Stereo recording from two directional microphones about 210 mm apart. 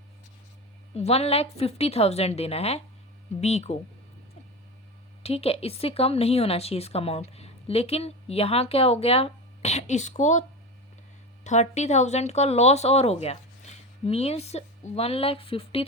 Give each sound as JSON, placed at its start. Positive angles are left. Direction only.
{"t": 0.9, "sound": "speech", "side_deg": 30}
{"t": 5.2, "sound": "speech", "side_deg": 30}
{"t": 11.4, "sound": "speech", "side_deg": 35}